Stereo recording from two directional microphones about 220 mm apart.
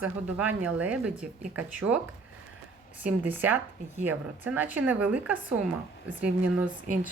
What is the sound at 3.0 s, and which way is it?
A woman's voice, 5° right (ahead or behind).